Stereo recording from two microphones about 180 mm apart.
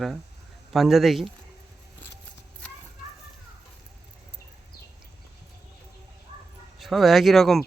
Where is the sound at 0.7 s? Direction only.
Centre (ahead or behind).